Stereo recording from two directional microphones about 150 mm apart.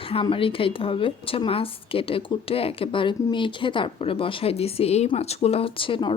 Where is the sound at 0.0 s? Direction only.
35° left (ahead or behind).